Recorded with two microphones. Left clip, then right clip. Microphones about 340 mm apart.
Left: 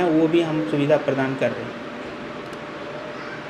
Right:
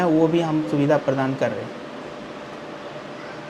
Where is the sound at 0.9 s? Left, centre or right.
Right.